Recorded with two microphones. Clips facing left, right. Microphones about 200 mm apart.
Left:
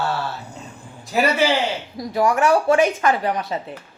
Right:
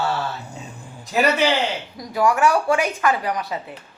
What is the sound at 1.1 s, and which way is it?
Speech, 5° left (ahead or behind).